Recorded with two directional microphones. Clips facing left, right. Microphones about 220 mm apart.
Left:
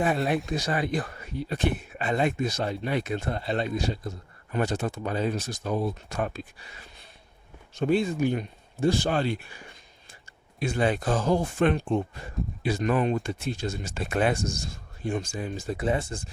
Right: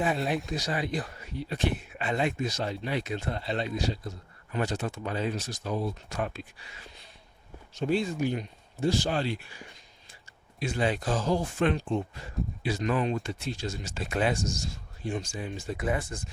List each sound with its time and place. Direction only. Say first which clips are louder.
0.5 s speech: left 3 dB; 55° left (ahead or behind)
7.8 s speech: left 4 dB; 55° left (ahead or behind)
10.6 s speech: left 3 dB; 55° left (ahead or behind); by 16.3 s 30° left (ahead or behind)